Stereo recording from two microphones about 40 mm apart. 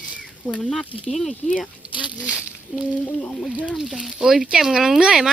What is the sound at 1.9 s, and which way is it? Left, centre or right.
Zipper, right.